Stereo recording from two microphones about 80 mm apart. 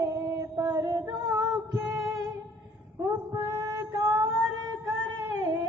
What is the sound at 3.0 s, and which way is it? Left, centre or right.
Female singing, right.